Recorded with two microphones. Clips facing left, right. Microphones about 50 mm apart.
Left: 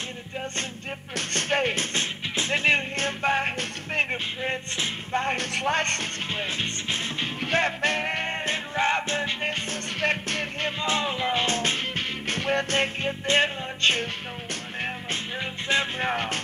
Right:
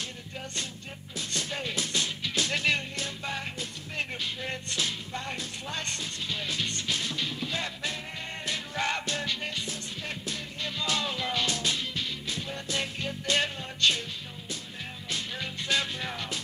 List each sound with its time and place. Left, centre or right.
1.1 s speech: left
2.3 s music: left
3.0 s music: left
5.2 s music: left
7.3 s music: left
8.7 s music: left
9.9 s music: left
10.8 s music: left
12.7 s music: left
14.5 s music: left
15.3 s music: left
16.0 s music: left